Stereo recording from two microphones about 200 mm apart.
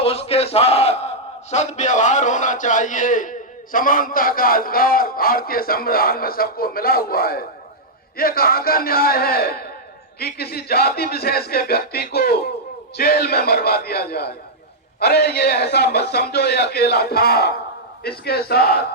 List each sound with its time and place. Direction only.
0.0 s a man's voice: 30° left (ahead or behind); by 18.8 s 50° left (ahead or behind)